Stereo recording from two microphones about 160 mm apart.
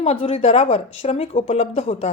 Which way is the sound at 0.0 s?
40° left (ahead or behind).